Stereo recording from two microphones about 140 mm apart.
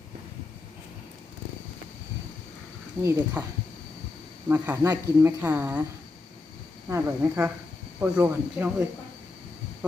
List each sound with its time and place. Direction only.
3.0 s speech: 20° right (ahead or behind)
4.4 s speech: 15° right (ahead or behind)
6.8 s speech: 15° right (ahead or behind)